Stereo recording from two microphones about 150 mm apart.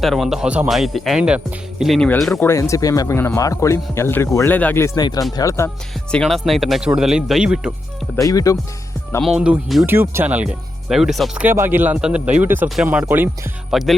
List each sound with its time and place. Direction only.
0.0 s speech: centre (ahead or behind)
2.4 s a man's voice: 20° left (ahead or behind)
4.9 s speech: 25° left (ahead or behind)
6.1 s speech: 5° left (ahead or behind)
8.1 s speech: 25° left (ahead or behind)
9.2 s speech: 5° right (ahead or behind)
9.8 s speech: 15° right (ahead or behind)
11.4 s speech: 15° right (ahead or behind)
13.7 s speech: centre (ahead or behind)